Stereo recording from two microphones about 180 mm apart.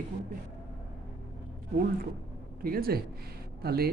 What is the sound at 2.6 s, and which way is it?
Speech, 55° right (ahead or behind).